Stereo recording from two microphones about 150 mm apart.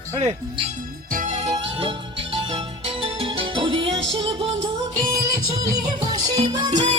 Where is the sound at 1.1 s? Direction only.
55° right (ahead or behind).